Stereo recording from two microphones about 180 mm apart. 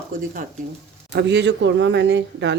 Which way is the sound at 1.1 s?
75° right (ahead or behind).